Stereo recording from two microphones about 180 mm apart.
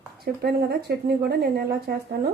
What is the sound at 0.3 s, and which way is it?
Speech, 55° right (ahead or behind).